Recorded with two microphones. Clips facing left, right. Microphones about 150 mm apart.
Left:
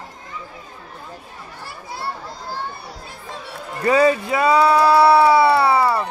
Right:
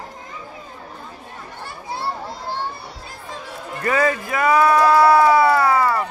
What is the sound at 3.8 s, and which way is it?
Speech, 20° left (ahead or behind).